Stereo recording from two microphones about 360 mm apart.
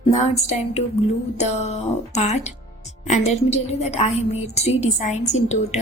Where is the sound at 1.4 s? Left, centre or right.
Centre.